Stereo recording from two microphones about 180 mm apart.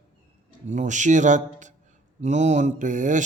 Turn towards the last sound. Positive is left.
turn(degrees=-45)  # may be behind; listen again after turning